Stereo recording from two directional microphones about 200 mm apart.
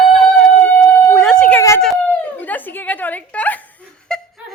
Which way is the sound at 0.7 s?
5° left (ahead or behind).